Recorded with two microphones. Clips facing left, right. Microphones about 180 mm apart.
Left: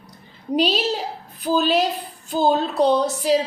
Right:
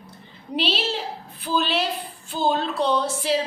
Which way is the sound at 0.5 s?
40° left (ahead or behind).